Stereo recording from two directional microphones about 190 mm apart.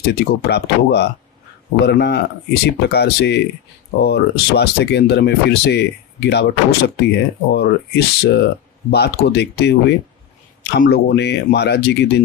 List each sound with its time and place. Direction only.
0.0 s speech: 60° left (ahead or behind)
10.8 s speech: 65° left (ahead or behind)